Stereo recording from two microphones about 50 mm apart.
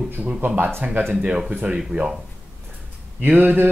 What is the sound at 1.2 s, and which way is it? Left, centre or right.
Speech, right.